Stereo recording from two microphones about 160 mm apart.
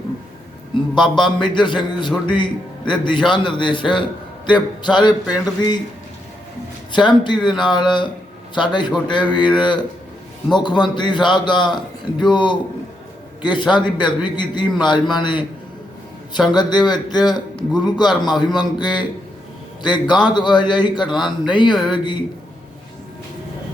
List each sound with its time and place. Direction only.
1.1 s a man's voice: 30° left (ahead or behind)
6.9 s a man's voice: 30° left (ahead or behind)
16.5 s a man's voice: 25° left (ahead or behind)